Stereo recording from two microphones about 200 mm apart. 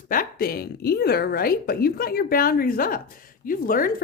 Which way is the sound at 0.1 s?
45° left (ahead or behind).